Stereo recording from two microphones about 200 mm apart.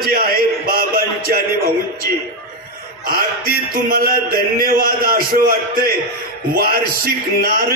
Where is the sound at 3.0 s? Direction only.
45° right (ahead or behind).